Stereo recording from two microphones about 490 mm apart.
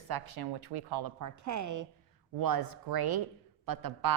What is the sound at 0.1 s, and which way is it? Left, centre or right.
A woman's voice, right.